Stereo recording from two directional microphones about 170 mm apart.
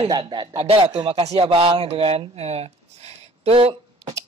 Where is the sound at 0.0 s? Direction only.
25° right (ahead or behind).